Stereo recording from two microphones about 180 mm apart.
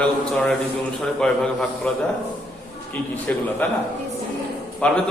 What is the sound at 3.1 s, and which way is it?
Speech, 10° left (ahead or behind).